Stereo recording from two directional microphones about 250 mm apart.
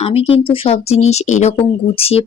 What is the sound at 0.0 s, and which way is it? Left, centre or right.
Speech, left.